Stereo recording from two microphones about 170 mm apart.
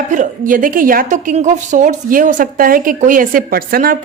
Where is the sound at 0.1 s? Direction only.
50° right (ahead or behind).